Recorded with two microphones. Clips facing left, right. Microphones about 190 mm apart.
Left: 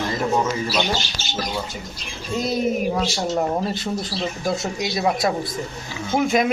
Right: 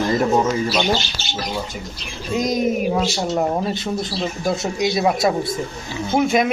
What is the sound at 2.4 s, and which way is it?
Speech, 15° right (ahead or behind).